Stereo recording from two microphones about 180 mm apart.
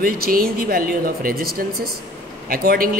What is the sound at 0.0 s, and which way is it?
A man's voice, 55° right (ahead or behind).